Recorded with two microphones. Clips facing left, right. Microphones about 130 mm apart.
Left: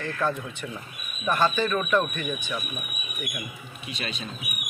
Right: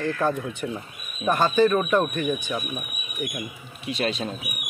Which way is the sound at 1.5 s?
40° right (ahead or behind).